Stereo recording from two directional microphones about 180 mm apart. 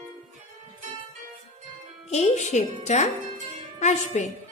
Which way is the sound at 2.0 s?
40° left (ahead or behind).